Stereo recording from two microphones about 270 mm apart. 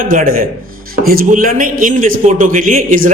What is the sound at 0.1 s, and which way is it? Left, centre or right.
A man's voice, right.